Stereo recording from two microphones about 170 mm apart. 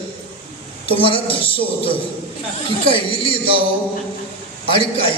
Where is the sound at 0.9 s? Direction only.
30° left (ahead or behind).